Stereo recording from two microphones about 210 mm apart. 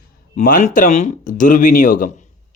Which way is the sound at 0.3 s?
35° left (ahead or behind).